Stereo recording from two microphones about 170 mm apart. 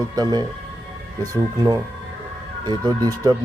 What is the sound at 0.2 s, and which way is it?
Speech, 25° right (ahead or behind).